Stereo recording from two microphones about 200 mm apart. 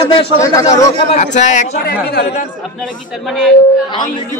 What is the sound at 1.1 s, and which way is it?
Speech, 35° left (ahead or behind).